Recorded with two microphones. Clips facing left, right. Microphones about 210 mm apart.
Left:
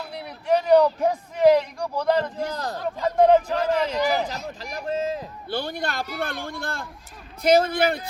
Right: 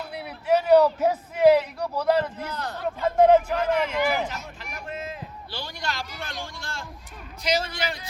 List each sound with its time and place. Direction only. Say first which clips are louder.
0.1 s a sound: even; 5° right (ahead or behind)
2.5 s speech: left 3 dB; 35° left (ahead or behind)
3.2 s speech: even; 5° right (ahead or behind)
3.6 s speech: left 1 dB; 35° left (ahead or behind)
5.5 s a man's voice: left 7 dB; 55° left (ahead or behind)